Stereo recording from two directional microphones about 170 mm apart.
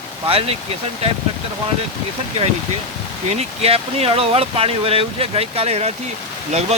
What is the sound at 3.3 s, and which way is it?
Speech, 40° right (ahead or behind).